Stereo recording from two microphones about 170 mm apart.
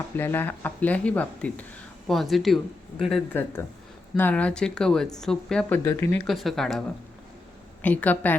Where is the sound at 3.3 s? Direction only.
10° left (ahead or behind).